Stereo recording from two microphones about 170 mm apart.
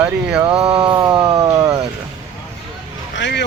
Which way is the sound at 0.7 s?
30° right (ahead or behind).